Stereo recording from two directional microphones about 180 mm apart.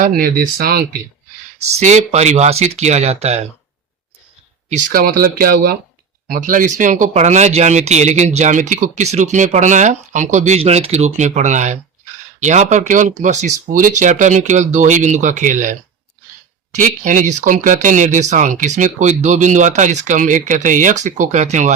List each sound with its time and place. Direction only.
0.0 s speech: 55° right (ahead or behind)
1.5 s speech: 40° right (ahead or behind)
4.7 s speech: 50° right (ahead or behind)
16.7 s speech: 45° right (ahead or behind)